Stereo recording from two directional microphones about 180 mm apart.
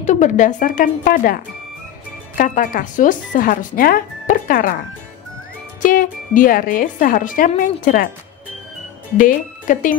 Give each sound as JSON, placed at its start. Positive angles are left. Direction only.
{"t": 0.0, "sound": "speech", "side_deg": 45}
{"t": 5.8, "sound": "speech", "side_deg": 50}
{"t": 9.1, "sound": "speech", "side_deg": 45}